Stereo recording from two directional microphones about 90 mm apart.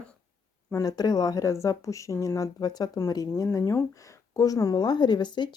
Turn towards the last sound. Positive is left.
turn(degrees=55)  # may be behind; listen again after turning